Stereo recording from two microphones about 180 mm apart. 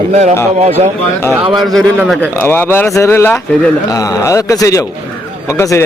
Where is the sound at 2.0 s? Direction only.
10° left (ahead or behind).